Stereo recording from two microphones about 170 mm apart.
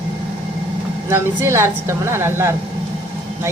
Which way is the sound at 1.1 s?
15° right (ahead or behind).